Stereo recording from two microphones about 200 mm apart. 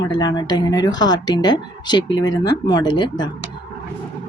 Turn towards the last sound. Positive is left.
turn(degrees=20)  # may be behind; listen again after turning